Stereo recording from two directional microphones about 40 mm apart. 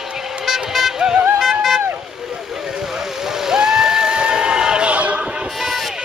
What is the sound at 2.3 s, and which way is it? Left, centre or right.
Vehicle, centre.